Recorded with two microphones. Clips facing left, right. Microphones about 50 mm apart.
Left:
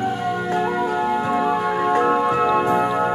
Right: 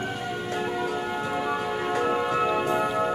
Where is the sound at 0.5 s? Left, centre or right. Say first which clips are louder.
Left 6 dB; left.